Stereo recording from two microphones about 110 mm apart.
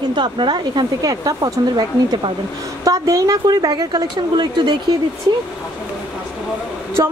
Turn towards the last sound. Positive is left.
turn(degrees=-35)  # may be behind; listen again after turning